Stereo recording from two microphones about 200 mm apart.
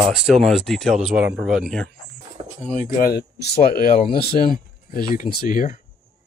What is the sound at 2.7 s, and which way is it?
Speech, 45° left (ahead or behind).